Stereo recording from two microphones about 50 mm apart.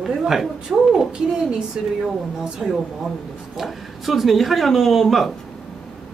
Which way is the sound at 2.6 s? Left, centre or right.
Right.